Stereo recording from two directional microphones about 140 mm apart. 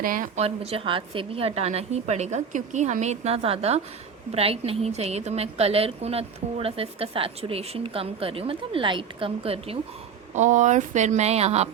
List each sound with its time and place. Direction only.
0.0 s speech: 80° right
0.3 s a woman's voice: 45° right (ahead or behind)
10.3 s speech: 60° right (ahead or behind)